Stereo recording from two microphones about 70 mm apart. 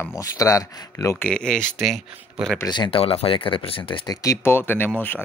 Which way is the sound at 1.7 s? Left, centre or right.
Centre.